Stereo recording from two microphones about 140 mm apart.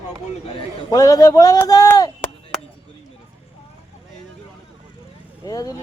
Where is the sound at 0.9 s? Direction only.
25° left (ahead or behind).